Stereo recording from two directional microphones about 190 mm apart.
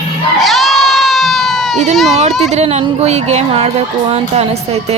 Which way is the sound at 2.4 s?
35° right (ahead or behind).